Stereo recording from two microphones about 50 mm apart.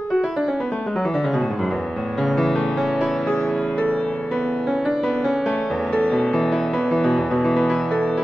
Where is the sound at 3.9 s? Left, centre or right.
Centre.